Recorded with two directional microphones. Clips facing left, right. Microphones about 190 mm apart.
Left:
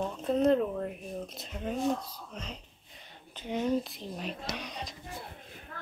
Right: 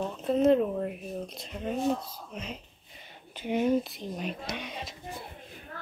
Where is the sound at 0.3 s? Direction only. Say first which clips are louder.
Right 3 dB; 5° right (ahead or behind).